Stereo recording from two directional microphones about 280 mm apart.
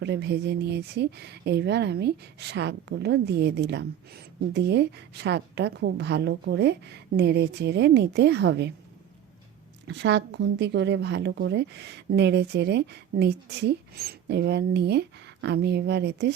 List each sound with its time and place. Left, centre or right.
0.0 s speech: right
9.8 s speech: right